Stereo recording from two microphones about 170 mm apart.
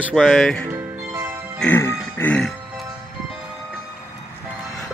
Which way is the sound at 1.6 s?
15° left (ahead or behind).